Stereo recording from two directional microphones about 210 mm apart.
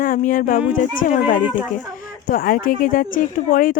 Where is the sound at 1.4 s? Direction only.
10° right (ahead or behind).